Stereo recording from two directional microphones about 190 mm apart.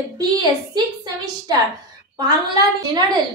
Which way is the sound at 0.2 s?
20° right (ahead or behind).